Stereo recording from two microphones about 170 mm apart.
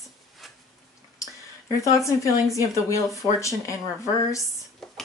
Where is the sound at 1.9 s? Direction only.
20° left (ahead or behind).